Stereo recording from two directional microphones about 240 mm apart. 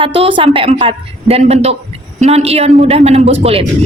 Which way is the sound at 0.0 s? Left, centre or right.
Right.